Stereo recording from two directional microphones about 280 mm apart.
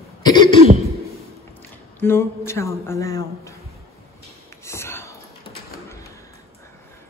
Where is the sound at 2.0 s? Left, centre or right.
Centre.